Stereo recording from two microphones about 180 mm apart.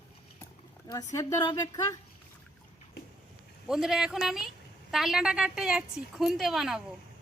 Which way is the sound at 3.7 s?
Centre (ahead or behind).